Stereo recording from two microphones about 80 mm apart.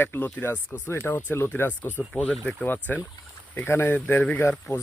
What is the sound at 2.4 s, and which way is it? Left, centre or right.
Speech, left.